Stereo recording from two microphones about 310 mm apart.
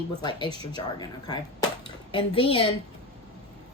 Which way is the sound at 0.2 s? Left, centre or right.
Centre.